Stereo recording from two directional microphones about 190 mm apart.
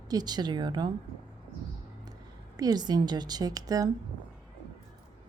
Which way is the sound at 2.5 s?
20° right (ahead or behind).